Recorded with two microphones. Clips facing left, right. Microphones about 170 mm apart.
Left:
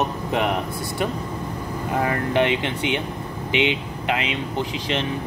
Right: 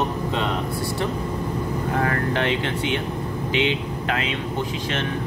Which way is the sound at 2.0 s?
20° left (ahead or behind).